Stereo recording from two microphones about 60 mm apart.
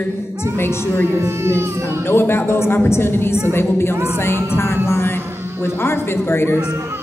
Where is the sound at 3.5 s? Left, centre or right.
Left.